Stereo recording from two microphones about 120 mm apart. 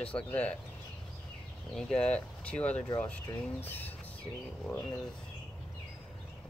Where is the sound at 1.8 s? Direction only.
5° left (ahead or behind).